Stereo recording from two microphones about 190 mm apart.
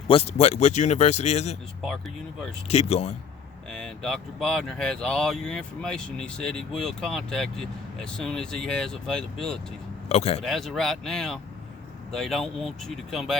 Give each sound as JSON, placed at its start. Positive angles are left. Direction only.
{"t": 0.1, "sound": "speech", "side_deg": 35}
{"t": 1.8, "sound": "speech", "side_deg": 0}
{"t": 2.6, "sound": "speech", "side_deg": 35}
{"t": 3.7, "sound": "speech", "side_deg": 0}
{"t": 10.1, "sound": "speech", "side_deg": 35}
{"t": 10.4, "sound": "speech", "side_deg": 0}